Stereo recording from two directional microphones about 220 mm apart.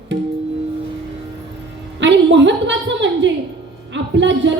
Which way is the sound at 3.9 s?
55° right (ahead or behind).